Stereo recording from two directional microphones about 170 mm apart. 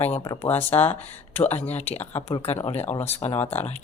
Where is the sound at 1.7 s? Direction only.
40° left (ahead or behind).